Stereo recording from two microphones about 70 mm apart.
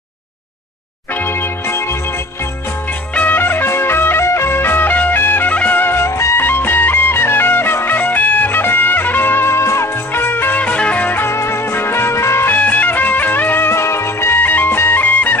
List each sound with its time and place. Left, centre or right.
1.2 s music: left
3.2 s music: left
6.4 s music: left
12.4 s music: left